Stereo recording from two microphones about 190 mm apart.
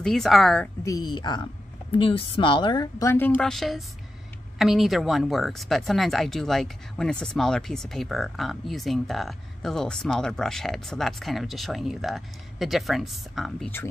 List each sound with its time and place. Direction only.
0.0 s speech: centre (ahead or behind)
0.8 s speech: 20° left (ahead or behind); by 13.7 s centre (ahead or behind)